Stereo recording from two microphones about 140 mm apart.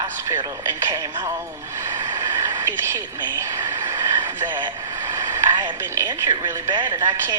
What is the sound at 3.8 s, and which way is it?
Vehicle, 25° right (ahead or behind).